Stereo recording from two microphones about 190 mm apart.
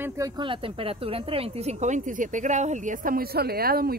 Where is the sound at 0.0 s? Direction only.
15° right (ahead or behind).